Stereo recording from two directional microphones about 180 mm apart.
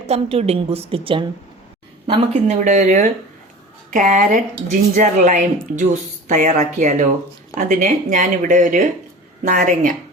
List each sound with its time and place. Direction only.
0.1 s a woman's voice: 35° right (ahead or behind)